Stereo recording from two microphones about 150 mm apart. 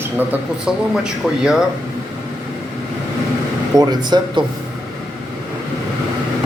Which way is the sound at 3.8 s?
30° right (ahead or behind).